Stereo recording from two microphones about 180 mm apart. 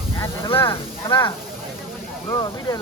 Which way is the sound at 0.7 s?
25° left (ahead or behind).